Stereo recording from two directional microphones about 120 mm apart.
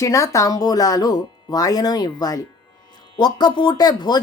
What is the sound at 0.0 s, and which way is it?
Speech, 25° left (ahead or behind).